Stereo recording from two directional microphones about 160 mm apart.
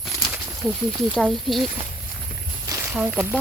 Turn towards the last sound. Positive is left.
turn(degrees=-10)  # may be behind; listen again after turning